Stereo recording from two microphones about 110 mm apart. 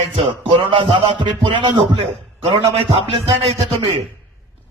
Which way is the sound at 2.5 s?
55° right (ahead or behind).